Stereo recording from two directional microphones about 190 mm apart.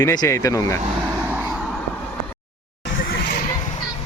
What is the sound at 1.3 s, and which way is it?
Vehicle, 10° right (ahead or behind).